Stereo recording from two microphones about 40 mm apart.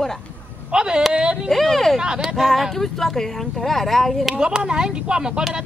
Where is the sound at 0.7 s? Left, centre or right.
Right.